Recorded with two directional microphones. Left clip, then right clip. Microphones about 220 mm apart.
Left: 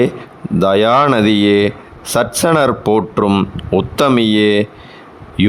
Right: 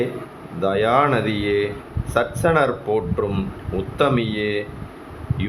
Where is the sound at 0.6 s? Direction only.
55° left (ahead or behind).